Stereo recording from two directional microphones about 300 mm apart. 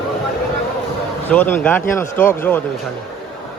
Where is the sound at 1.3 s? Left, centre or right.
Centre.